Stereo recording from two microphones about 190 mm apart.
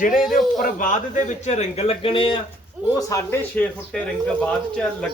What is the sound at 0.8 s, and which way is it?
A man's voice, 40° left (ahead or behind).